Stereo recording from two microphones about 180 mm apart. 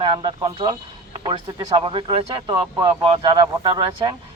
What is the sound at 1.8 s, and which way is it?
Speech, 30° right (ahead or behind).